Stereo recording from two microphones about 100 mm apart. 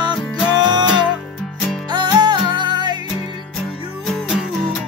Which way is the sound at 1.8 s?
45° right (ahead or behind).